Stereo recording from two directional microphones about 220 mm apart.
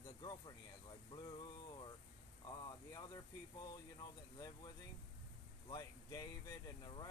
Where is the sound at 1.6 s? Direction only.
20° left (ahead or behind).